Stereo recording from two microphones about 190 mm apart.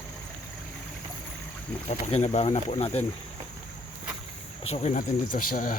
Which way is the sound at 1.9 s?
35° left (ahead or behind).